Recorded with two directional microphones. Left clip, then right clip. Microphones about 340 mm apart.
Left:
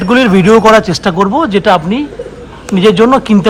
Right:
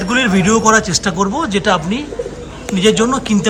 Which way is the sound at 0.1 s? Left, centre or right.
Centre.